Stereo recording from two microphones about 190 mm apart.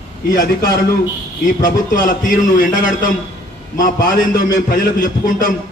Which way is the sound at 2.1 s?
45° left (ahead or behind).